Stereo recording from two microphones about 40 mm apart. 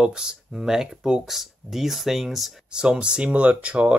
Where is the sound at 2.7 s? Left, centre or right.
Right.